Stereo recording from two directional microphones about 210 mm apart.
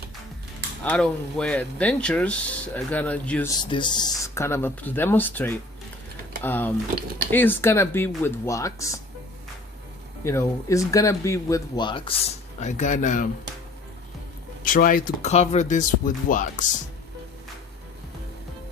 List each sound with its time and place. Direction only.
0.9 s speech: 5° left (ahead or behind)
3.6 s speech: 20° left (ahead or behind)
10.2 s speech: 15° left (ahead or behind)
12.5 s speech: 35° left (ahead or behind)
14.6 s speech: 40° left (ahead or behind)